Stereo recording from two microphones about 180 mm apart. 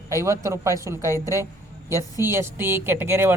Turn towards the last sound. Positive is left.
turn(degrees=-15)  # may be behind; listen again after turning